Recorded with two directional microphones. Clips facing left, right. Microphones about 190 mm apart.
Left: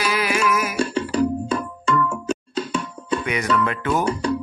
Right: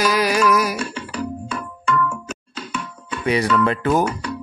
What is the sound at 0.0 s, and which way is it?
Music, 40° right (ahead or behind).